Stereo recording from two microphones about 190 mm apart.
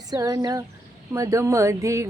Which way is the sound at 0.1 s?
20° right (ahead or behind).